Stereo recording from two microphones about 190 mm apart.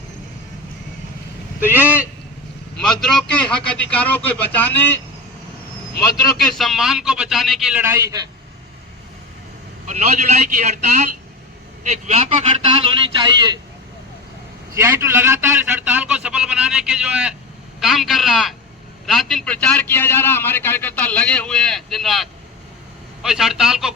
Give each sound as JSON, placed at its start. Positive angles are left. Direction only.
{"t": 1.6, "sound": "speech", "side_deg": -10}
{"t": 2.8, "sound": "a man's voice", "side_deg": 0}
{"t": 6.3, "sound": "a man's voice", "side_deg": 0}
{"t": 9.8, "sound": "a man's voice", "side_deg": -40}
{"t": 14.8, "sound": "a man's voice", "side_deg": -15}